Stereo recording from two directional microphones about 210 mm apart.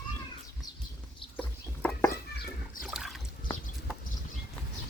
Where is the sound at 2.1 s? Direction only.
45° left (ahead or behind).